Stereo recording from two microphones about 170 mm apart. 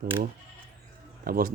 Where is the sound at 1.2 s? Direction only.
55° right (ahead or behind).